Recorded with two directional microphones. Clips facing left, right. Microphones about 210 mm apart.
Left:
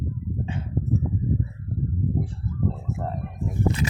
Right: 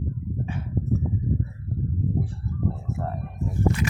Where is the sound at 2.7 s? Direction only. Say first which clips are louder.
Even; 15° left (ahead or behind).